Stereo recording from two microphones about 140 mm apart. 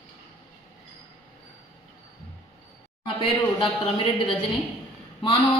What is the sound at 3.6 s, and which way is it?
Speech, 40° left (ahead or behind).